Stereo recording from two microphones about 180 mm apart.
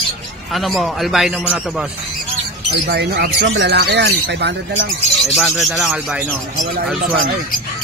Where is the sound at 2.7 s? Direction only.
65° right (ahead or behind).